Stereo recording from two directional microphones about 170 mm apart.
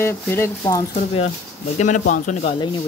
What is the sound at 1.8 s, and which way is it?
Speech, 45° left (ahead or behind).